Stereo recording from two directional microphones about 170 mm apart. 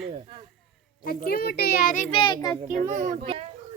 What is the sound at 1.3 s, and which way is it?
Speech, 65° left (ahead or behind).